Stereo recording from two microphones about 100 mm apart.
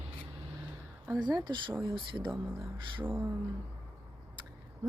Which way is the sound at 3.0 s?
20° right (ahead or behind).